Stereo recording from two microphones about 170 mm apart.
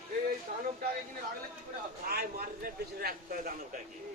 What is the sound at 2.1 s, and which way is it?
A man's voice, 65° right (ahead or behind).